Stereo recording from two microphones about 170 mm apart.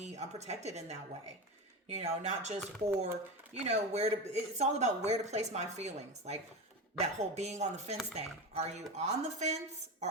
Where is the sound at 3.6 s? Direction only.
40° right (ahead or behind).